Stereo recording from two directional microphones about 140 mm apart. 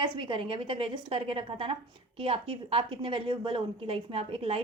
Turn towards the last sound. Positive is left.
turn(degrees=-40)  # may be behind; listen again after turning